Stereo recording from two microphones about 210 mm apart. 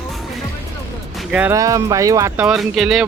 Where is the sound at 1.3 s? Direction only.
10° right (ahead or behind).